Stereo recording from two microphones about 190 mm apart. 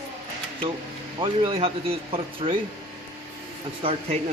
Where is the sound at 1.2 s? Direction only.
25° right (ahead or behind).